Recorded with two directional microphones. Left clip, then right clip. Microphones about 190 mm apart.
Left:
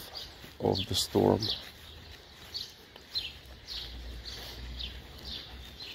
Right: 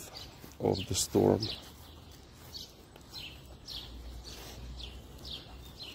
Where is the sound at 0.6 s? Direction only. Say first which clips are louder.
Left 2 dB; 20° right (ahead or behind).